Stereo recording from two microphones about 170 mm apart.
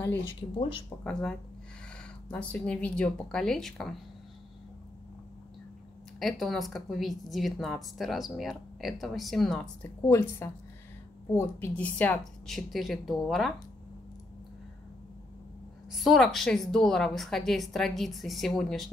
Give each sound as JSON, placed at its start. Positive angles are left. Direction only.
{"t": 0.6, "sound": "speech", "side_deg": 30}
{"t": 2.3, "sound": "a woman's voice", "side_deg": 10}
{"t": 6.1, "sound": "a woman's voice", "side_deg": 0}
{"t": 10.0, "sound": "a woman's voice", "side_deg": 15}
{"t": 15.9, "sound": "a woman's voice", "side_deg": 0}